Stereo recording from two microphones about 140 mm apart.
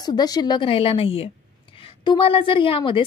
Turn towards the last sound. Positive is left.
turn(degrees=35)  # may be behind; listen again after turning